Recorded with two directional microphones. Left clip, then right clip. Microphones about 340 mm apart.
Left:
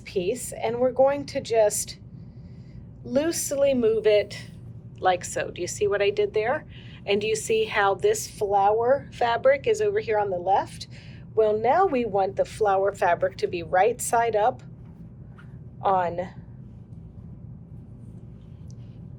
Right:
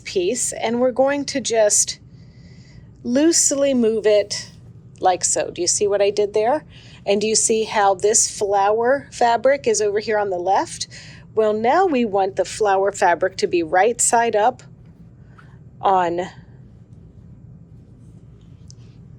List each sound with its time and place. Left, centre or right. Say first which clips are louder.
0.0 s speech: right 6 dB; right
3.0 s a woman's voice: right 8 dB; right
15.8 s speech: right 6 dB; right